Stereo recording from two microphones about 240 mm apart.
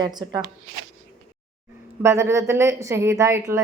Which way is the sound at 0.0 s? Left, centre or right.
Centre.